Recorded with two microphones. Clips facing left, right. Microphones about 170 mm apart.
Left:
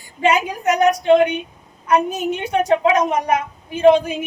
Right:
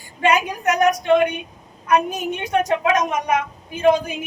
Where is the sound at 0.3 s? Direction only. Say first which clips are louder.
Left 2 dB; 30° left (ahead or behind).